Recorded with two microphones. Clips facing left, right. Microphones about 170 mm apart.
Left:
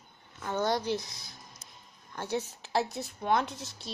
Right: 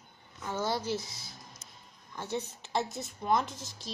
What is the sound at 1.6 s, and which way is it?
Music, 35° left (ahead or behind).